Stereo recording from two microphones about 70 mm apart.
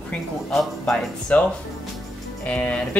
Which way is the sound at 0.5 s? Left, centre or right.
Centre.